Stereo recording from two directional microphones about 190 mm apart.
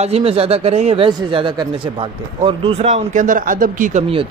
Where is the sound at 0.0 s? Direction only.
30° right (ahead or behind).